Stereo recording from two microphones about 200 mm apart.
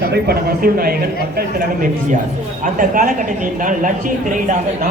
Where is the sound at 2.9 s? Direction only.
45° right (ahead or behind).